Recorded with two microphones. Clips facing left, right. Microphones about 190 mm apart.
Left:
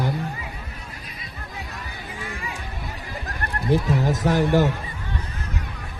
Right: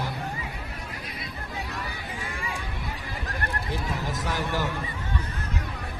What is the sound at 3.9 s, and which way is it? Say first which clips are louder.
Speech: left 9 dB; 50° left (ahead or behind).